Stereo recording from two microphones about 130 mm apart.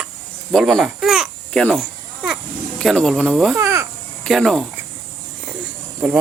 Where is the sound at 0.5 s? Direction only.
Centre (ahead or behind).